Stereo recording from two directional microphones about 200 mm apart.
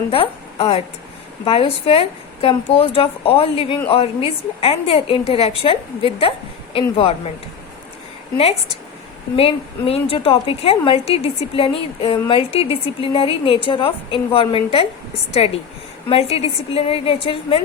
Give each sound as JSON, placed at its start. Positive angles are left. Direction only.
{"t": 0.1, "sound": "a woman's voice", "side_deg": 30}
{"t": 9.3, "sound": "a woman's voice", "side_deg": 30}